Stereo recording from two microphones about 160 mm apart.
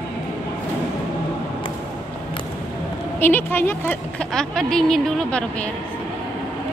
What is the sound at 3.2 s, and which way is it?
Speech, 10° left (ahead or behind).